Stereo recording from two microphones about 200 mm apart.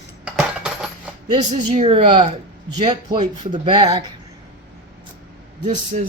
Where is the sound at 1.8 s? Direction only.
30° right (ahead or behind).